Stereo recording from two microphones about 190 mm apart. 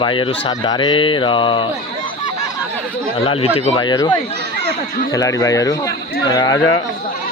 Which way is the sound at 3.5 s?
25° left (ahead or behind).